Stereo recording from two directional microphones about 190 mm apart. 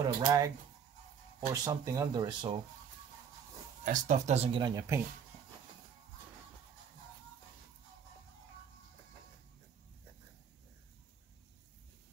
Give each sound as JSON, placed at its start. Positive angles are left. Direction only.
{"t": 0.0, "sound": "speech", "side_deg": -20}
{"t": 1.5, "sound": "speech", "side_deg": -15}
{"t": 3.8, "sound": "speech", "side_deg": -40}
{"t": 4.5, "sound": "speech", "side_deg": -25}